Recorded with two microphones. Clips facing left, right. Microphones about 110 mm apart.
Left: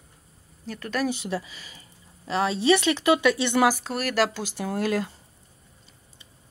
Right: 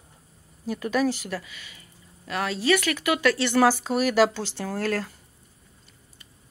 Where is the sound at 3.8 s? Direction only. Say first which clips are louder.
Right 4 dB; centre (ahead or behind).